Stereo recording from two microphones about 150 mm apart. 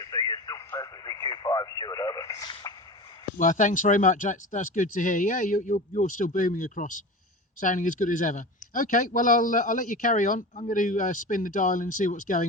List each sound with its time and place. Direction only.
0.0 s radio: 25° left (ahead or behind)
3.3 s speech: 55° left (ahead or behind)